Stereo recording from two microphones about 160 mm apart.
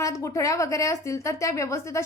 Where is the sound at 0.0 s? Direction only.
20° left (ahead or behind).